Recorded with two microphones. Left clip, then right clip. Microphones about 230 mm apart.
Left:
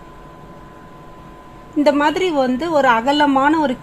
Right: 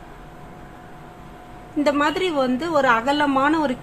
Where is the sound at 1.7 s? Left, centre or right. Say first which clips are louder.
Left 5 dB; centre.